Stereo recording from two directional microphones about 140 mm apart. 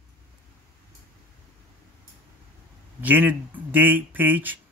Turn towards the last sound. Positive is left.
turn(degrees=-15)  # may be behind; listen again after turning